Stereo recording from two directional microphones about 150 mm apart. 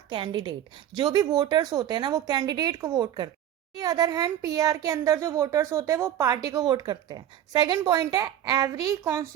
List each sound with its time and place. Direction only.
0.1 s a woman's voice: 30° right (ahead or behind)